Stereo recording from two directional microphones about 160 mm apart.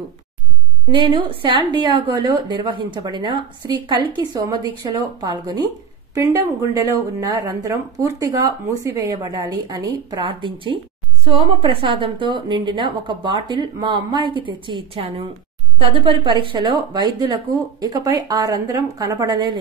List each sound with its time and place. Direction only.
0.9 s a woman's voice: 30° right (ahead or behind)